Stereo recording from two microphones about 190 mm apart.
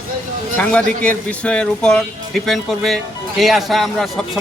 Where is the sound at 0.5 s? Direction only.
5° left (ahead or behind).